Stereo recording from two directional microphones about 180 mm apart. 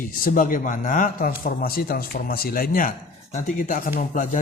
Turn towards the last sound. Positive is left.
turn(degrees=50)  # may be behind; listen again after turning